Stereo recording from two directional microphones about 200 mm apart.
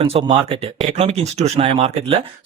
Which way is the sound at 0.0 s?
30° right (ahead or behind).